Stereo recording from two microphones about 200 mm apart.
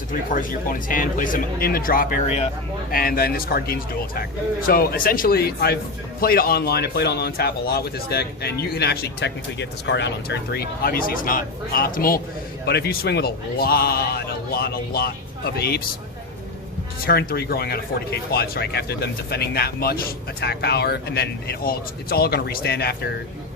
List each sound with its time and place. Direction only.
0.1 s speech: 45° left (ahead or behind)
2.9 s speech: 50° left (ahead or behind)
17.1 s speech: 50° left (ahead or behind)